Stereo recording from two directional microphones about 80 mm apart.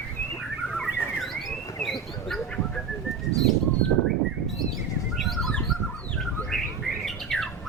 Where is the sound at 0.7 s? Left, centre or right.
Centre.